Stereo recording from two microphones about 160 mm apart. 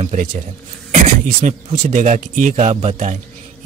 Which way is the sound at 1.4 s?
55° right (ahead or behind).